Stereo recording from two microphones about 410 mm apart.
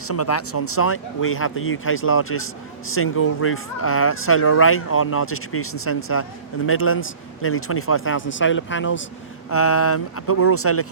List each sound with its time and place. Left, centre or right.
0.1 s a man's voice: left